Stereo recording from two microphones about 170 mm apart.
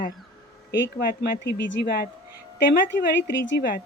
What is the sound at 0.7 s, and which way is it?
Speech, 90° left.